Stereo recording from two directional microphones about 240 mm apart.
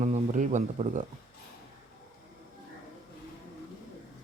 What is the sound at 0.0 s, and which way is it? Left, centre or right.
Speech, right.